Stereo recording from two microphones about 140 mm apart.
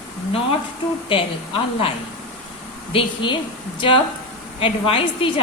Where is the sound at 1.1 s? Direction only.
40° left (ahead or behind).